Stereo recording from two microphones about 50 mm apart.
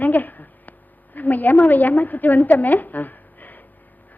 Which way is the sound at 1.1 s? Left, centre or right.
Left.